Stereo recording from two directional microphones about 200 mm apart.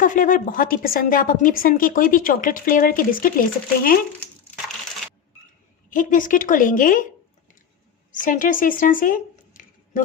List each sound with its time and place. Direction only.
0.0 s a woman's voice: 40° left (ahead or behind)
5.9 s a woman's voice: 40° left (ahead or behind)
8.1 s speech: 40° left (ahead or behind)